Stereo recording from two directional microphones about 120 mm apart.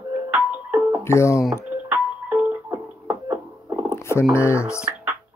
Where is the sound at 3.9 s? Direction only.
20° left (ahead or behind).